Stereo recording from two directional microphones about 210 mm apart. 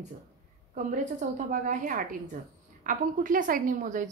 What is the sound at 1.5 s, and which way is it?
A woman's voice, 40° right (ahead or behind).